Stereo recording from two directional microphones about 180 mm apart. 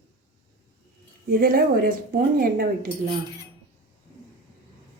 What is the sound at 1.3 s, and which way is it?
Speech, 55° right (ahead or behind).